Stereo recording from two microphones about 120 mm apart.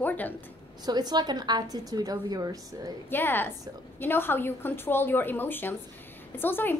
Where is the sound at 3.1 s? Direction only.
15° left (ahead or behind).